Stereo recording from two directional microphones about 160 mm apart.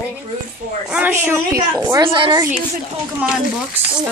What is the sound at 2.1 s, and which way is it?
Speech, 30° right (ahead or behind).